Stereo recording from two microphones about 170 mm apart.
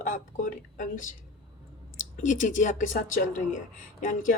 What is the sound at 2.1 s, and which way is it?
Speech, 50° left (ahead or behind).